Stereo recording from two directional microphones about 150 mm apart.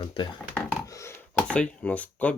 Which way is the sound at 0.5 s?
20° left (ahead or behind).